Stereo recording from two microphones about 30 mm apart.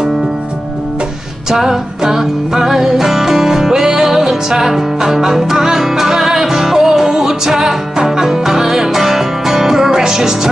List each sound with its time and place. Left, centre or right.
1.5 s music: centre